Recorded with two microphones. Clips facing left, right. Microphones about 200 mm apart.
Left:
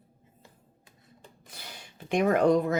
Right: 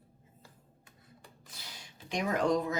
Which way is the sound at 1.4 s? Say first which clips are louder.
Left 6 dB; 55° left (ahead or behind).